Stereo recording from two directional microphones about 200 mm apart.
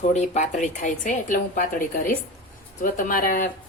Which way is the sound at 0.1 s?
35° left (ahead or behind).